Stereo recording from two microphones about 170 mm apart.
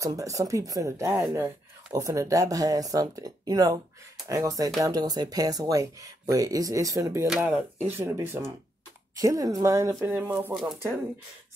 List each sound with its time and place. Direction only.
0.0 s speech: 20° right (ahead or behind)
7.2 s speech: 5° right (ahead or behind)
8.0 s speech: 15° right (ahead or behind)
10.5 s speech: centre (ahead or behind)